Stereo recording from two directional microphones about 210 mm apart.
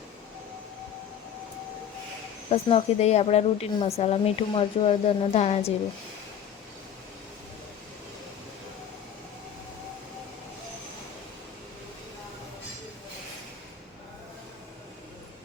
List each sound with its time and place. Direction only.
2.5 s speech: 25° left (ahead or behind)